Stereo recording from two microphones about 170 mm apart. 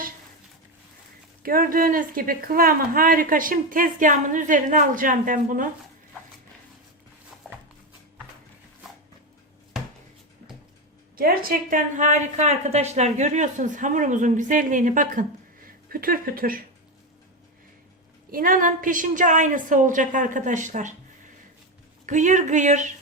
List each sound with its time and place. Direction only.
1.4 s speech: 55° right (ahead or behind)
7.4 s a sound: centre (ahead or behind)
11.2 s a woman's voice: 60° right (ahead or behind)
18.3 s a woman's voice: 55° right (ahead or behind)
22.0 s a woman's voice: 45° right (ahead or behind)